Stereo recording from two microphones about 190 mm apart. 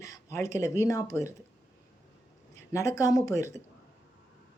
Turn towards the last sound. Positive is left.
turn(degrees=15)  # may be behind; listen again after turning